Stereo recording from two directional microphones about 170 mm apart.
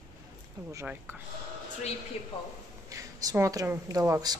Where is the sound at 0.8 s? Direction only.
10° right (ahead or behind).